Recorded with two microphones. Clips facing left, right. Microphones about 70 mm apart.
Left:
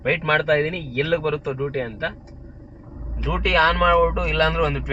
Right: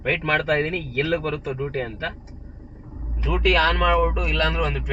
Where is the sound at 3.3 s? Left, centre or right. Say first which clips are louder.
Right 1 dB; left.